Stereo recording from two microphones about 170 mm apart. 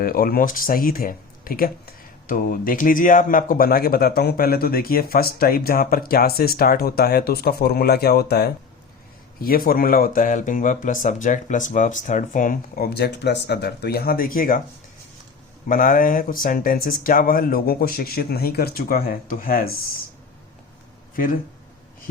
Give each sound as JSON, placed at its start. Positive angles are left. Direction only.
{"t": 0.0, "sound": "a man's voice", "side_deg": 60}
{"t": 9.4, "sound": "a man's voice", "side_deg": 60}
{"t": 15.7, "sound": "a man's voice", "side_deg": 55}